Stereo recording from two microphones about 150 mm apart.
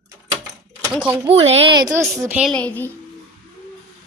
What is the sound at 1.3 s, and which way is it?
Speech, 35° right (ahead or behind).